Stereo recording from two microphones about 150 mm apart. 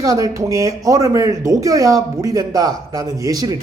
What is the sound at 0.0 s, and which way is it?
Speech, 25° right (ahead or behind).